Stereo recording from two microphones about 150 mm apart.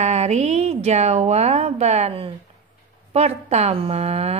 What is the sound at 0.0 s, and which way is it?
A woman's voice, 50° right (ahead or behind).